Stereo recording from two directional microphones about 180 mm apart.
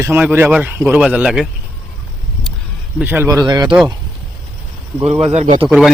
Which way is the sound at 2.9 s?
10° right (ahead or behind).